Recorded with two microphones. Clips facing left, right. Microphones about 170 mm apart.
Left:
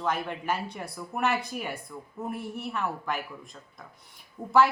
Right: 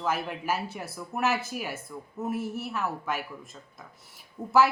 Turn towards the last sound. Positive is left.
turn(degrees=-5)  # may be behind; listen again after turning